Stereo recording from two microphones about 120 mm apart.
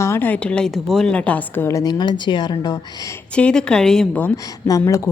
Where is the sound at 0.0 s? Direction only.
20° left (ahead or behind); by 3.1 s 35° left (ahead or behind).